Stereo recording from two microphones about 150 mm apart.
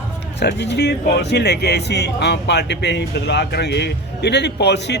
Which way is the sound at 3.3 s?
90° left.